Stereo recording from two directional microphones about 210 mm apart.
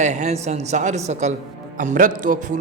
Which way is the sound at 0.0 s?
35° right (ahead or behind).